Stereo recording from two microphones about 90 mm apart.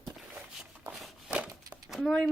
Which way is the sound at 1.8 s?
Centre (ahead or behind).